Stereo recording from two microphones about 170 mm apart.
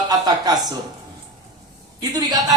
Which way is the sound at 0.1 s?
20° right (ahead or behind).